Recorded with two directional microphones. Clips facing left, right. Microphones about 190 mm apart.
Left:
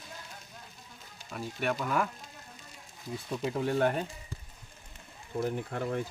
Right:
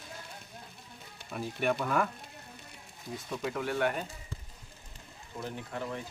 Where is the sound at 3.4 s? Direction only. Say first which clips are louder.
Left 3 dB; 25° left (ahead or behind).